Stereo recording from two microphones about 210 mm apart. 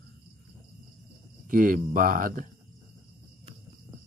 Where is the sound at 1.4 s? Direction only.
40° right (ahead or behind).